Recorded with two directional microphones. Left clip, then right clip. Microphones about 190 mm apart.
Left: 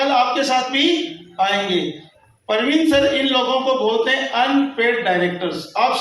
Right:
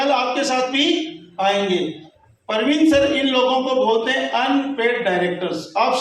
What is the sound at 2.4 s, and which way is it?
Speech, 35° left (ahead or behind).